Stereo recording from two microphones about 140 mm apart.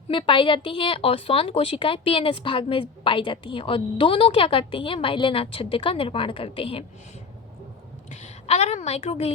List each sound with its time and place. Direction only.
0.1 s a woman's voice: 35° left (ahead or behind)
8.1 s a woman's voice: 50° left (ahead or behind)